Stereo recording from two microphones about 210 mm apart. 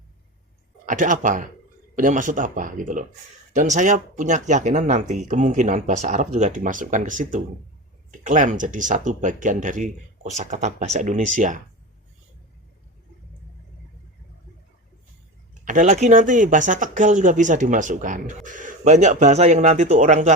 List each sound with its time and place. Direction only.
0.9 s speech: 40° right (ahead or behind)
15.6 s speech: 40° right (ahead or behind)